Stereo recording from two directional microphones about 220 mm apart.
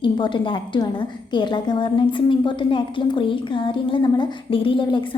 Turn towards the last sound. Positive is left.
turn(degrees=20)  # may be behind; listen again after turning